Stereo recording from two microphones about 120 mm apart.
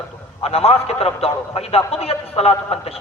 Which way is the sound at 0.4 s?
55° left (ahead or behind).